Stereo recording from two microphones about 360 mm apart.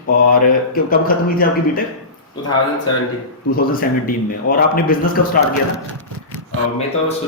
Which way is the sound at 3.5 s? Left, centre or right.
Left.